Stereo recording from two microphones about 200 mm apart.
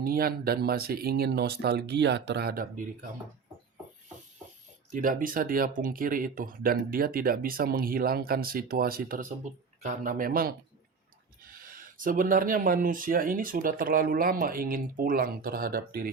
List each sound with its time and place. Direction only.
0.0 s speech: 50° right (ahead or behind)
4.9 s speech: 40° right (ahead or behind)